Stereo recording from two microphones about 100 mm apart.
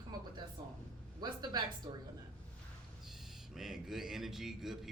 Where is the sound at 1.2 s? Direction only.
45° right (ahead or behind).